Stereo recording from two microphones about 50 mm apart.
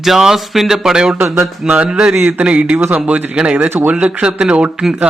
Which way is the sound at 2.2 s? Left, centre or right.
Right.